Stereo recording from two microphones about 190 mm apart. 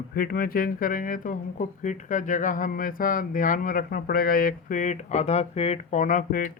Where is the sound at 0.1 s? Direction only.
50° left (ahead or behind).